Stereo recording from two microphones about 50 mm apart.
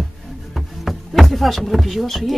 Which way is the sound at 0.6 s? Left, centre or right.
Centre.